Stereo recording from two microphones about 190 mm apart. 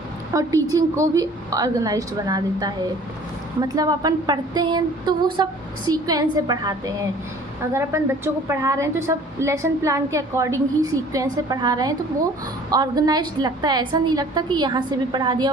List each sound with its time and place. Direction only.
0.3 s a woman's voice: 20° right (ahead or behind)